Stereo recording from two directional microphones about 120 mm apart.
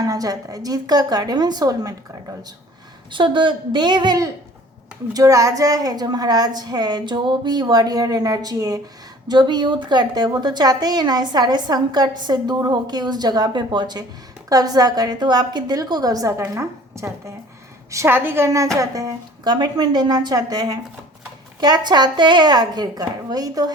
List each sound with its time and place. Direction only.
0.0 s a woman's voice: 30° right (ahead or behind)
3.1 s a woman's voice: 45° right (ahead or behind)